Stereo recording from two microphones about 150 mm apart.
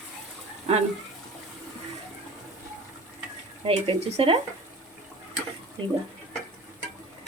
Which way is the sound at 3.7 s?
40° right (ahead or behind).